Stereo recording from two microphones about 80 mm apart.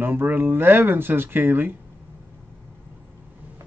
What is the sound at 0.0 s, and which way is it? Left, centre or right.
Speech, right.